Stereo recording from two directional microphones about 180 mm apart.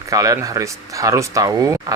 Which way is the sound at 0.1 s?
20° right (ahead or behind).